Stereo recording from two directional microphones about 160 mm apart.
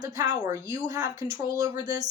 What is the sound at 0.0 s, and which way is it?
A woman's voice, 20° right (ahead or behind).